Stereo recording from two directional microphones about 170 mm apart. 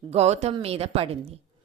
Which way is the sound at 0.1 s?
40° right (ahead or behind).